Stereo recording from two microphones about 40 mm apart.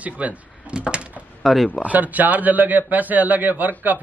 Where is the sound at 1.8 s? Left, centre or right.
Right.